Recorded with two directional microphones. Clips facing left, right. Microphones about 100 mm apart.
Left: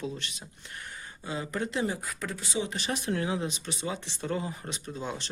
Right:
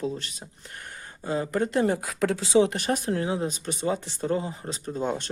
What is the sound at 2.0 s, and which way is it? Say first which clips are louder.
Speech: right 10 dB; 90° right.